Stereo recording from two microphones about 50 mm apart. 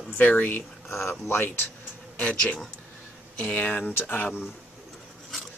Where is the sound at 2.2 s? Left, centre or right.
Left.